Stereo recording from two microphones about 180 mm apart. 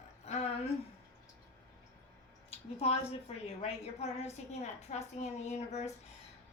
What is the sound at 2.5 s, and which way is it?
A woman's voice, 35° left (ahead or behind).